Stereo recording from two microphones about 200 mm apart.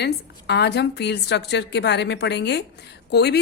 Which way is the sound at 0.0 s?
55° left (ahead or behind).